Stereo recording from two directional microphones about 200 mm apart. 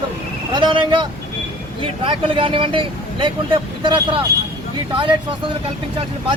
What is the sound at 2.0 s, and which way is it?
Speech, 25° right (ahead or behind).